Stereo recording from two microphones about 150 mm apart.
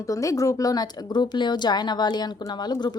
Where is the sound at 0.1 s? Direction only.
20° left (ahead or behind).